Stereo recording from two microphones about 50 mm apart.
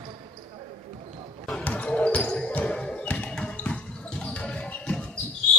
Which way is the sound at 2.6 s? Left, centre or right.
Centre.